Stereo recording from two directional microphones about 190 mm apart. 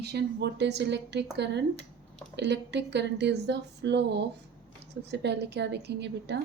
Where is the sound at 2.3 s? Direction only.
65° right (ahead or behind).